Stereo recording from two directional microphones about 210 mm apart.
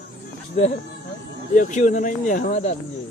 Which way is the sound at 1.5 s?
40° left (ahead or behind).